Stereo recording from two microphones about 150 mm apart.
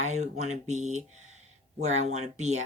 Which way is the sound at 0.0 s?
50° right (ahead or behind).